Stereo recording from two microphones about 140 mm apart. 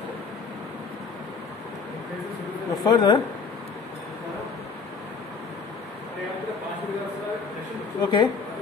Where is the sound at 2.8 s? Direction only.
30° left (ahead or behind).